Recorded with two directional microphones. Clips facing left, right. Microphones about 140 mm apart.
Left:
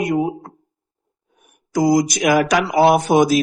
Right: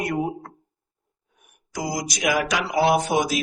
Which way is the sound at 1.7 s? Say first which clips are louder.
Left 13 dB; 50° left (ahead or behind).